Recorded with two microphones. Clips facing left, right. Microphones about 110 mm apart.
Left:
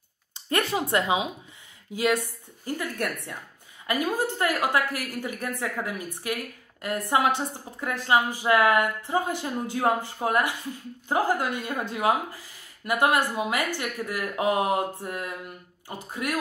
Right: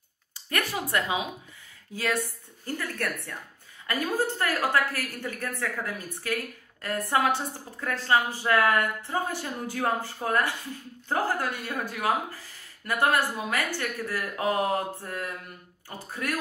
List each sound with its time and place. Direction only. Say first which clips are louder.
0.3 s a woman's voice: left 5 dB; 25° left (ahead or behind)